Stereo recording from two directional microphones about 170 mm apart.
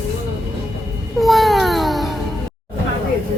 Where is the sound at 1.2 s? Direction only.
Centre (ahead or behind).